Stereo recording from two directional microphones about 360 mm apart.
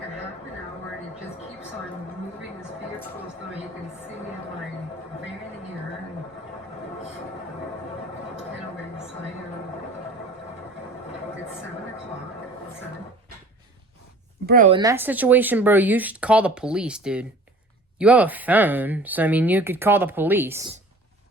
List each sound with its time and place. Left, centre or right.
14.4 s speech: right
14.8 s speech: centre